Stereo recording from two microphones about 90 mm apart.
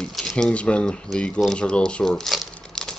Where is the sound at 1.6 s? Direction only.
10° left (ahead or behind).